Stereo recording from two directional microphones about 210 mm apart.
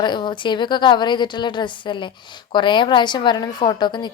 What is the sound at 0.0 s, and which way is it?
A woman's voice, 20° left (ahead or behind).